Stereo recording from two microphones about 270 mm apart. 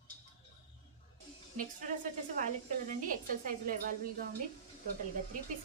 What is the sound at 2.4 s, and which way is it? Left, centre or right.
A woman's voice, right.